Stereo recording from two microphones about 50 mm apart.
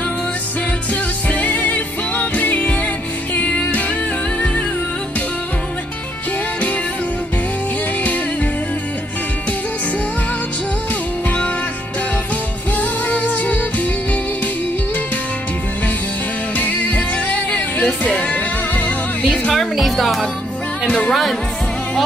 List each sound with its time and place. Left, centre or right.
1.3 s music: left
11.2 s music: left
12.7 s music: left
16.5 s music: left
19.8 s speech: centre
20.8 s speech: left
21.1 s speech: centre